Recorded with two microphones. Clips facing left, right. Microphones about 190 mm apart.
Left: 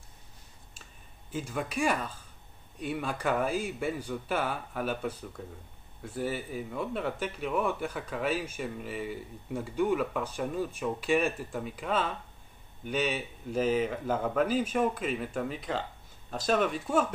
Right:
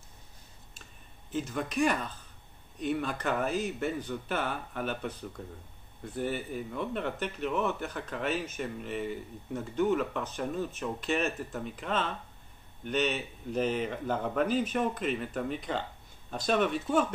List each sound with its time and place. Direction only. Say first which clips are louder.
1.3 s speech: right 1 dB; 5° left (ahead or behind)